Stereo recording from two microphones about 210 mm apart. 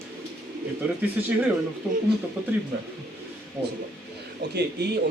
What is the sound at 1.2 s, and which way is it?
Speech, 5° right (ahead or behind).